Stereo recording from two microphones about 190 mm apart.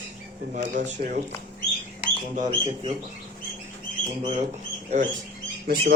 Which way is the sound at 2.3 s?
40° right (ahead or behind).